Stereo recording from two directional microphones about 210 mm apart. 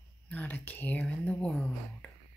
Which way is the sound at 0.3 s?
10° left (ahead or behind).